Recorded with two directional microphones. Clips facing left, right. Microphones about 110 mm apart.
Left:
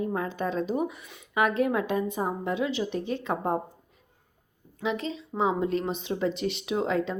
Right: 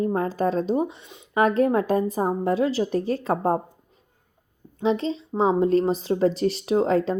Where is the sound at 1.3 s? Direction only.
35° right (ahead or behind).